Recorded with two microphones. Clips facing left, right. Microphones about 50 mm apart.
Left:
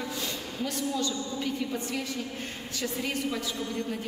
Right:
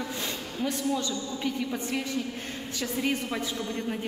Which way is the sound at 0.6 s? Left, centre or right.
Right.